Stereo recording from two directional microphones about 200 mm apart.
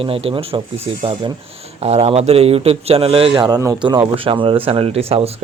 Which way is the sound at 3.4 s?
15° right (ahead or behind).